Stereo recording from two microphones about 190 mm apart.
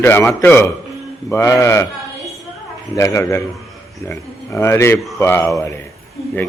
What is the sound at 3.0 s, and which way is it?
Speech, 15° left (ahead or behind).